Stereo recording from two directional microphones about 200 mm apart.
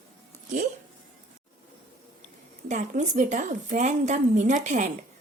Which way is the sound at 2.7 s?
35° right (ahead or behind).